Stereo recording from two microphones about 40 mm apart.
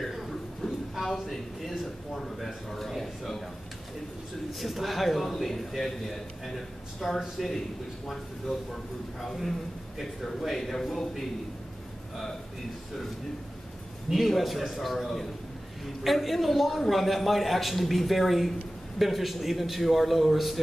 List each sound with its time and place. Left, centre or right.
0.0 s a sound: centre
2.3 s a man's voice: centre
4.5 s a man's voice: centre
14.1 s a man's voice: centre